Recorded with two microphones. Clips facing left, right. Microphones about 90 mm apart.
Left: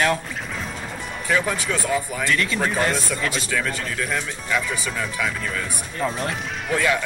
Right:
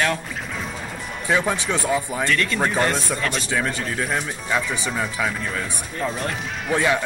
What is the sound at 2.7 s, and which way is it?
Speech, centre (ahead or behind).